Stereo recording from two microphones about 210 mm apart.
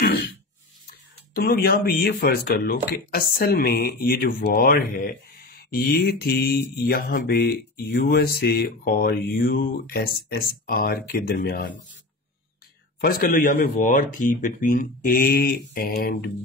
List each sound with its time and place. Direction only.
1.3 s speech: 45° left (ahead or behind)
13.0 s speech: 40° left (ahead or behind)